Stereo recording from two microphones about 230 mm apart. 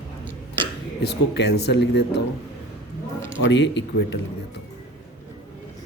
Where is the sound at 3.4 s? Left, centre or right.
Left.